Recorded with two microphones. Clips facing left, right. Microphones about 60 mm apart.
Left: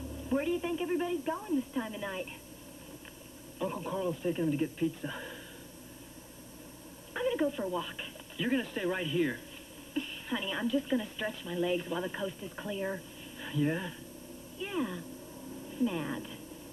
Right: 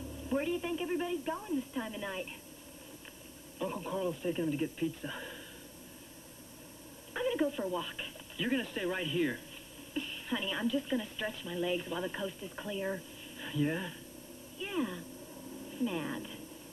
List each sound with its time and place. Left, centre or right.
0.3 s a woman's voice: centre
3.5 s a woman's voice: centre
7.2 s a woman's voice: centre